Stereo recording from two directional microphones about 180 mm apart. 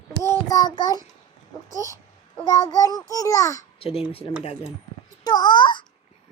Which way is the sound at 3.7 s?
30° left (ahead or behind).